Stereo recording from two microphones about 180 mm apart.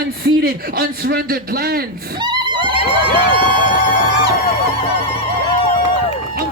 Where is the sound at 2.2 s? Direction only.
25° right (ahead or behind).